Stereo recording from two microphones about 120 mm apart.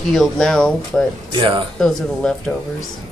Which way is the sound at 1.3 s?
45° right (ahead or behind).